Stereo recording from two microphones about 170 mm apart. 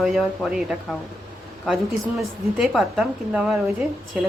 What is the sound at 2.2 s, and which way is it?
Speech, centre (ahead or behind).